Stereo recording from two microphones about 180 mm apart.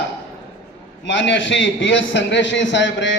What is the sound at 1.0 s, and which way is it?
A man's voice, 90° left.